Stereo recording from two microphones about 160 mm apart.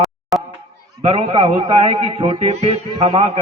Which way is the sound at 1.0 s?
35° right (ahead or behind).